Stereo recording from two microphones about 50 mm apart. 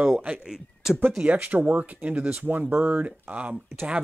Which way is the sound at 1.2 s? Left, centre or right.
Right.